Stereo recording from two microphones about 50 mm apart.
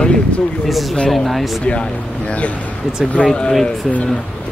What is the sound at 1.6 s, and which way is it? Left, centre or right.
Speech, left.